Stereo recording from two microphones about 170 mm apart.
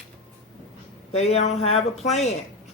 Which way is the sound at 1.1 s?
40° left (ahead or behind).